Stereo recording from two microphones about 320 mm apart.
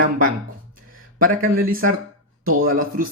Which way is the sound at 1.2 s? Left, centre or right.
Right.